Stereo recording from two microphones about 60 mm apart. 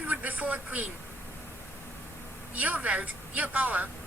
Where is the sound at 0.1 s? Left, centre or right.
Right.